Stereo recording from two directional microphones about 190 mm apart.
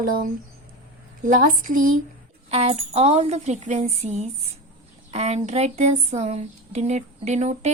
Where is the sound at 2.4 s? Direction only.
35° right (ahead or behind).